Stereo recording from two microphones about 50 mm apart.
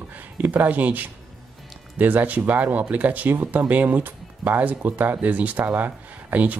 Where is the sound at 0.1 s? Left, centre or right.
Right.